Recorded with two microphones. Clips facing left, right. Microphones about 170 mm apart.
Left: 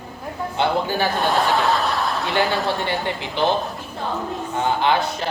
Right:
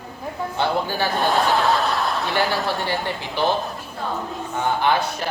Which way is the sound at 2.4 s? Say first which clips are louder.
Left 3 dB; 20° left (ahead or behind).